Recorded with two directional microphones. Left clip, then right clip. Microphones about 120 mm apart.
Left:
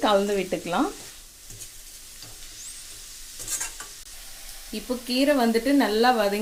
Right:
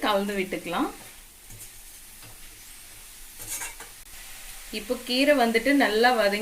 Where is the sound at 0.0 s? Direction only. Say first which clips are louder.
Left 4 dB; 65° left (ahead or behind).